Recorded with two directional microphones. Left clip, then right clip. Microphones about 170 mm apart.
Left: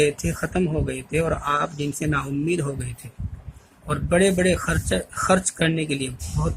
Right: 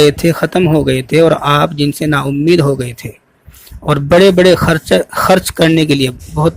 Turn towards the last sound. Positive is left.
turn(degrees=-45)  # may be behind; listen again after turning